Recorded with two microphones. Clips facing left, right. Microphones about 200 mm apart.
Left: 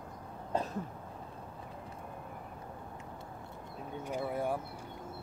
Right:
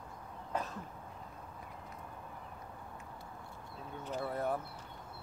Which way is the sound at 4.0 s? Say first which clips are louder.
Left 2 dB; 10° left (ahead or behind).